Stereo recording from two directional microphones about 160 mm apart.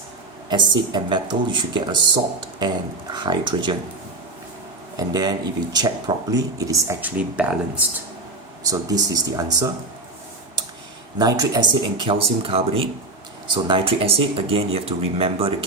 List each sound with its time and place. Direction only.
0.4 s speech: 30° right (ahead or behind)
4.9 s speech: 25° right (ahead or behind)
7.2 s speech: 10° right (ahead or behind)
8.6 s speech: 20° right (ahead or behind)
11.2 s speech: 25° right (ahead or behind)